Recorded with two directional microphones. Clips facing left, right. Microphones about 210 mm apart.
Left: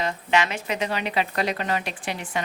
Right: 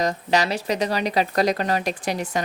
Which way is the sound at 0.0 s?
40° right (ahead or behind).